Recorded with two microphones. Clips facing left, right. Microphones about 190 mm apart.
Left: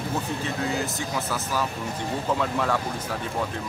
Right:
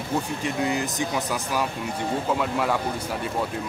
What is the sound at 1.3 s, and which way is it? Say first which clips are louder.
Speech: right 1 dB; 15° right (ahead or behind).